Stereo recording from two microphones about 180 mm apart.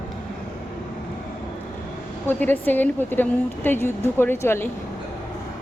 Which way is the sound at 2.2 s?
10° left (ahead or behind).